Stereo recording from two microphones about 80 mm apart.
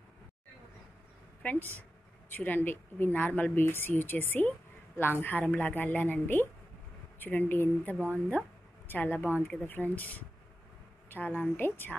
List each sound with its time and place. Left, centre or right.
1.4 s a woman's voice: centre